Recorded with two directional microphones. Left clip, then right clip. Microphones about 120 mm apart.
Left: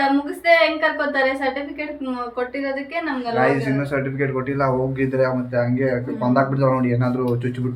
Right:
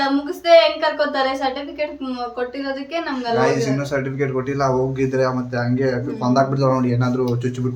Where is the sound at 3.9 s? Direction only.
20° right (ahead or behind).